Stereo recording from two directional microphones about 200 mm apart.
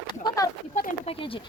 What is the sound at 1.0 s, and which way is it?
Speech, 25° left (ahead or behind).